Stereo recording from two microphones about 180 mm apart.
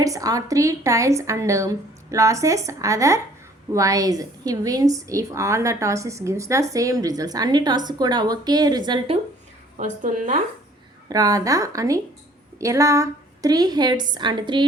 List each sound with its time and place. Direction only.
0.0 s a woman's voice: 20° right (ahead or behind)
9.7 s a woman's voice: 45° right (ahead or behind)
11.1 s a woman's voice: 20° right (ahead or behind)